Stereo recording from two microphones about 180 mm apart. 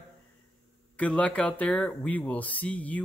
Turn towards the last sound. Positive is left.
turn(degrees=10)  # may be behind; listen again after turning